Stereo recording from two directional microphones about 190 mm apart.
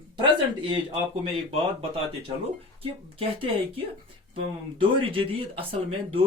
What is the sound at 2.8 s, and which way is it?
Speech, 30° right (ahead or behind).